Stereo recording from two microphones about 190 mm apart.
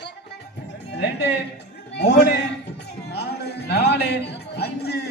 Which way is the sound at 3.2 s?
60° left (ahead or behind).